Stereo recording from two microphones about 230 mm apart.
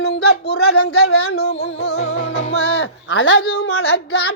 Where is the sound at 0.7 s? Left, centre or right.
Left.